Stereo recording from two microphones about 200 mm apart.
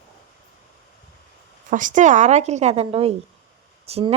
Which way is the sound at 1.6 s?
40° right (ahead or behind).